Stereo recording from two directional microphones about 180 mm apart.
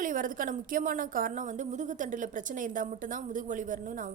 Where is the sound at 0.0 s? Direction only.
45° right (ahead or behind).